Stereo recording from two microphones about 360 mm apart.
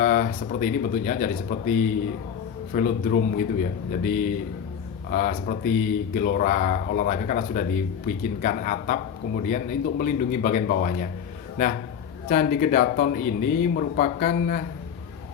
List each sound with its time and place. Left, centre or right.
0.0 s speech: left
12.3 s speech: left